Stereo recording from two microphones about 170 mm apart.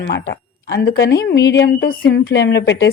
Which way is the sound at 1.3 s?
85° left.